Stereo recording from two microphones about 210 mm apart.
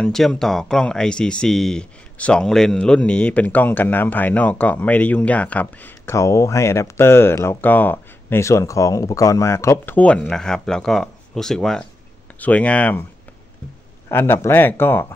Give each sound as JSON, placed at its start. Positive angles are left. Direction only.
{"t": 0.0, "sound": "speech", "side_deg": 5}
{"t": 14.0, "sound": "speech", "side_deg": 10}